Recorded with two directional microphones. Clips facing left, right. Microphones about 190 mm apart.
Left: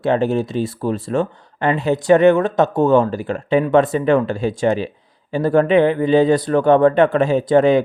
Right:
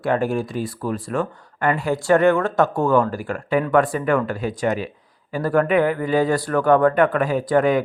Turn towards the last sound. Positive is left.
turn(degrees=25)  # may be behind; listen again after turning